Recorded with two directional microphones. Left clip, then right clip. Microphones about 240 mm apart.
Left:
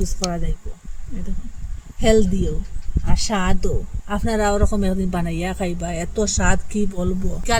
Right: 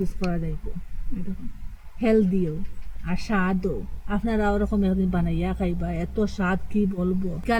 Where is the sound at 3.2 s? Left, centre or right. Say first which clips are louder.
Left 3 dB; centre.